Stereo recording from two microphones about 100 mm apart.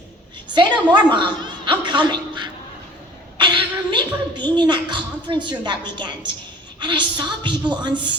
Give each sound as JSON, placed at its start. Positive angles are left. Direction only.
{"t": 0.5, "sound": "a woman's voice", "side_deg": -50}